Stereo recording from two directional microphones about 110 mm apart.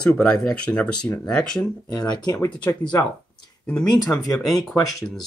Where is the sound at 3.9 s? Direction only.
35° left (ahead or behind).